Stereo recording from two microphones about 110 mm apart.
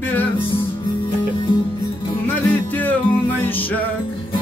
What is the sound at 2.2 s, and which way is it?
Music, 15° left (ahead or behind).